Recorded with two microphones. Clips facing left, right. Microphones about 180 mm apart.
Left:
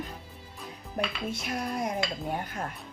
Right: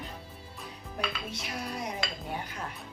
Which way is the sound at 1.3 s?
50° left (ahead or behind).